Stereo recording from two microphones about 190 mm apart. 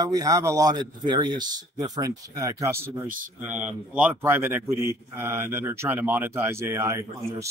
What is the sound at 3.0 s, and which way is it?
Speech, 45° right (ahead or behind).